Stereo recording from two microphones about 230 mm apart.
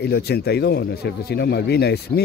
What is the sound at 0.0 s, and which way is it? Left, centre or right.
Speech, left.